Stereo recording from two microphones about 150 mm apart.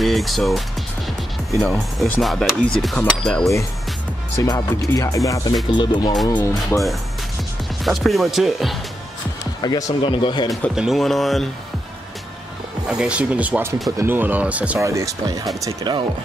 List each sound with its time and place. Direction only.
0.0 s speech: centre (ahead or behind)
2.1 s speech: 5° left (ahead or behind)
4.4 s speech: 25° left (ahead or behind)
6.7 s speech: 15° left (ahead or behind)
7.8 s speech: centre (ahead or behind)
9.6 s speech: 25° left (ahead or behind)
10.5 s speech: centre (ahead or behind)
12.9 s speech: 5° right (ahead or behind)
14.8 s speech: 20° right (ahead or behind)